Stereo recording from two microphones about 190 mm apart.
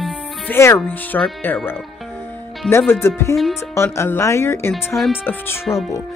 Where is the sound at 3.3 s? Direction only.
Centre (ahead or behind).